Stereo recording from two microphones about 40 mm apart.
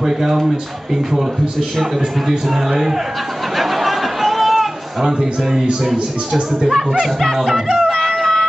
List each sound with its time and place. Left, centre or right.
0.0 s a man's voice: centre
1.8 s a man's voice: centre
3.5 s chatter: centre
5.0 s a man's voice: centre
6.9 s music: centre
7.3 s a man's voice: centre
8.2 s music: centre